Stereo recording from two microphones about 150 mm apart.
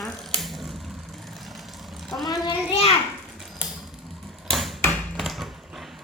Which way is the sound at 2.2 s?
25° left (ahead or behind).